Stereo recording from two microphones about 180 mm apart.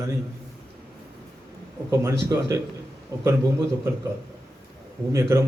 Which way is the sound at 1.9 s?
15° right (ahead or behind).